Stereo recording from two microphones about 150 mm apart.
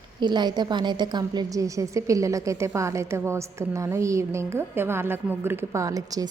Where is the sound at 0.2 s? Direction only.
30° right (ahead or behind).